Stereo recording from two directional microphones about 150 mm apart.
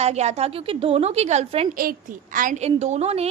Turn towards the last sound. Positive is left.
turn(degrees=-45)  # may be behind; listen again after turning